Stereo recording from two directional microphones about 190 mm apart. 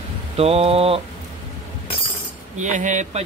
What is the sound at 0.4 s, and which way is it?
Speech, 30° right (ahead or behind).